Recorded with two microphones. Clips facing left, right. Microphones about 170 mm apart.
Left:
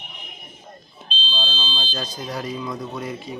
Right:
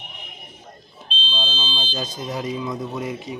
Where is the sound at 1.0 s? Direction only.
20° right (ahead or behind).